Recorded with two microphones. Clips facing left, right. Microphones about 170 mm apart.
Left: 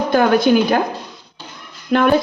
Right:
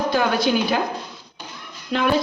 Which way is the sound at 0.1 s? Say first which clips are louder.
Left 9 dB; 50° left (ahead or behind).